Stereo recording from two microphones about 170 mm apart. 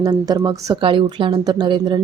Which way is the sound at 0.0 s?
25° right (ahead or behind).